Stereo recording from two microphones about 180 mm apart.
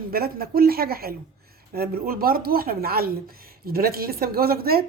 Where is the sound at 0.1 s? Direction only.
55° right (ahead or behind).